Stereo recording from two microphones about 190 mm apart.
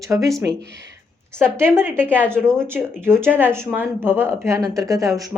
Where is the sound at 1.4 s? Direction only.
10° right (ahead or behind).